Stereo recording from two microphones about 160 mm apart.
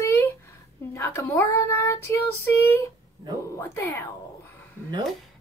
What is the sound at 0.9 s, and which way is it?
A child's voice, 15° left (ahead or behind).